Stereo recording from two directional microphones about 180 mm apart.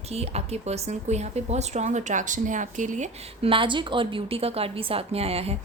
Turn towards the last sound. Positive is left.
turn(degrees=-35)  # may be behind; listen again after turning